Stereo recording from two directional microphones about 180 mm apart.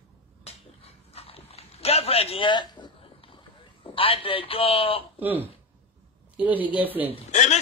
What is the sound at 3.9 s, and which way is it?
A man's voice, 30° left (ahead or behind).